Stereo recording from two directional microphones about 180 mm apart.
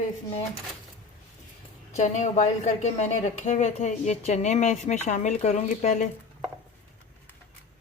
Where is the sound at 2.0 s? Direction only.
40° left (ahead or behind).